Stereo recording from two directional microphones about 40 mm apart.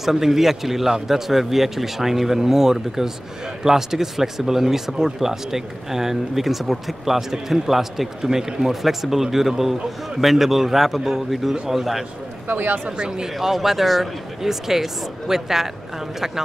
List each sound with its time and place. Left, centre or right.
0.0 s a man's voice: centre
12.4 s speech: right
12.8 s speech: right